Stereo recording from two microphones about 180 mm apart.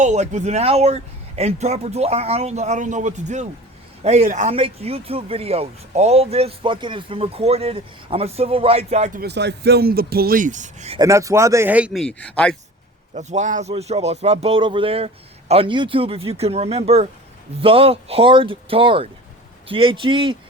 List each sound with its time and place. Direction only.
0.0 s speech: 40° right (ahead or behind)
9.2 s speech: 70° right (ahead or behind); by 11.0 s 35° right (ahead or behind)
11.0 s speech: 15° right (ahead or behind)
12.0 s speech: 5° left (ahead or behind)
13.1 s a man's voice: 40° right (ahead or behind)